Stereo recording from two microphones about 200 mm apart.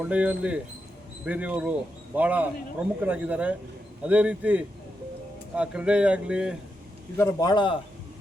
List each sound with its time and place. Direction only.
0.0 s a man's voice: 5° right (ahead or behind)
7.2 s a man's voice: 15° left (ahead or behind)